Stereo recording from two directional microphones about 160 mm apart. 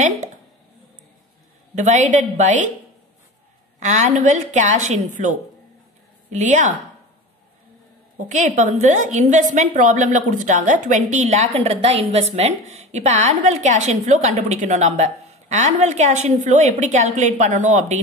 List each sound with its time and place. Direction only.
1.8 s a woman's voice: 50° right (ahead or behind)
3.8 s a woman's voice: 50° right (ahead or behind)
8.3 s a woman's voice: 50° right (ahead or behind)